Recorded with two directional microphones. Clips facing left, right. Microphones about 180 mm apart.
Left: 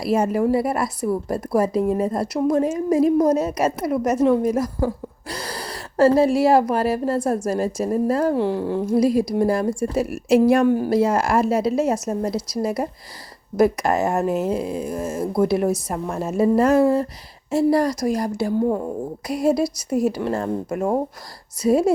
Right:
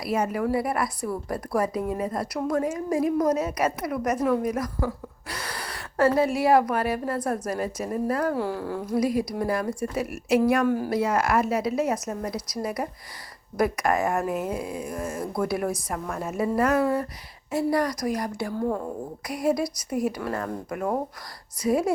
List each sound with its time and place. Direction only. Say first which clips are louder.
0.0 s a woman's voice: left 6 dB; 30° left (ahead or behind)